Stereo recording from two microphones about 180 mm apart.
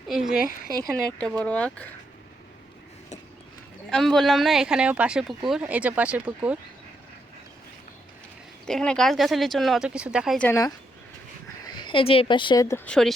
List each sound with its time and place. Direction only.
0.1 s a woman's voice: 5° right (ahead or behind)
3.8 s a woman's voice: centre (ahead or behind)
8.6 s a woman's voice: 5° left (ahead or behind)
10.3 s speech: 10° left (ahead or behind)
11.6 s speech: 25° left (ahead or behind)
12.6 s speech: 10° left (ahead or behind)